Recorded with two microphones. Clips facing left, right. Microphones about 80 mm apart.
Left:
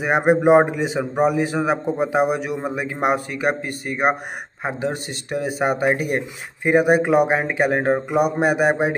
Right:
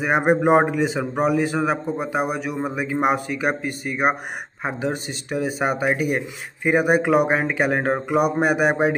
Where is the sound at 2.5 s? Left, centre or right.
Centre.